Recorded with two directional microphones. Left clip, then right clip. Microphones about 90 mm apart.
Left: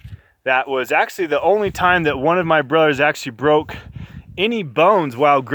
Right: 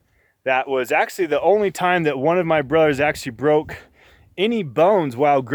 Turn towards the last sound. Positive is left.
turn(degrees=-30)  # may be behind; listen again after turning